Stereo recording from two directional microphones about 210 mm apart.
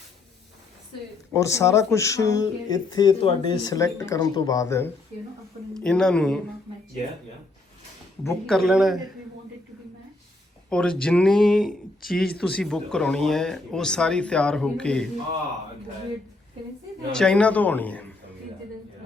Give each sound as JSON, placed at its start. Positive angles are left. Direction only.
{"t": 1.3, "sound": "speech", "side_deg": 15}
{"t": 5.7, "sound": "speech", "side_deg": 5}
{"t": 8.4, "sound": "speech", "side_deg": 0}
{"t": 10.7, "sound": "speech", "side_deg": 5}
{"t": 17.1, "sound": "speech", "side_deg": 5}